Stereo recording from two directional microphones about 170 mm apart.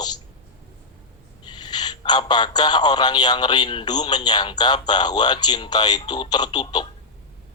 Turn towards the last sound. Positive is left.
turn(degrees=25)  # may be behind; listen again after turning